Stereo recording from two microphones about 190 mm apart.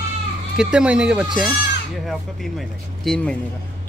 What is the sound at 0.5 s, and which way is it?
Speech, 5° right (ahead or behind).